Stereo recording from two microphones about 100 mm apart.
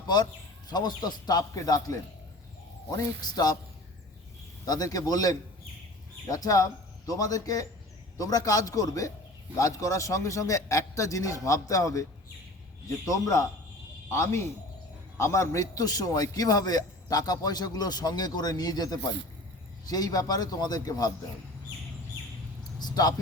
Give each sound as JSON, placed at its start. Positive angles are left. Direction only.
{"t": 0.7, "sound": "a man's voice", "side_deg": 45}
{"t": 4.6, "sound": "a man's voice", "side_deg": 40}
{"t": 13.1, "sound": "a man's voice", "side_deg": 35}
{"t": 22.8, "sound": "a sound", "side_deg": 40}